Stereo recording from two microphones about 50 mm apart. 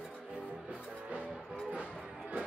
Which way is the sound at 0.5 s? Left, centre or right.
Right.